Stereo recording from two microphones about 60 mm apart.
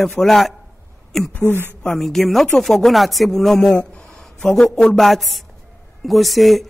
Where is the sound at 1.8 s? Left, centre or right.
Centre.